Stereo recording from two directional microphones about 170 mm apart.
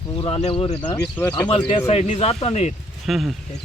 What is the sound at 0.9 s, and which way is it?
Speech, 15° left (ahead or behind).